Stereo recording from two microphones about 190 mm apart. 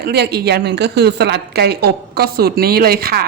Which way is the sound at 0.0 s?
55° right (ahead or behind).